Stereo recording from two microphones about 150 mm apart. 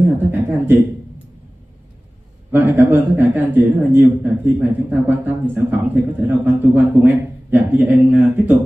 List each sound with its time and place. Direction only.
0.3 s a man's voice: 10° right (ahead or behind)
2.5 s a man's voice: 10° right (ahead or behind)